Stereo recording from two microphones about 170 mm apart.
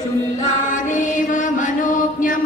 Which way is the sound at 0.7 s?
50° left (ahead or behind).